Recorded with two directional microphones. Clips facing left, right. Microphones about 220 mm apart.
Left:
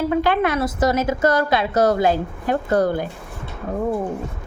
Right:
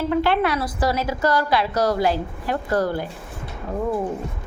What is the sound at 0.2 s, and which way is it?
A woman's voice, 15° left (ahead or behind).